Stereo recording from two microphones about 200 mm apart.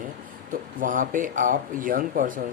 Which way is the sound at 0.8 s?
40° right (ahead or behind).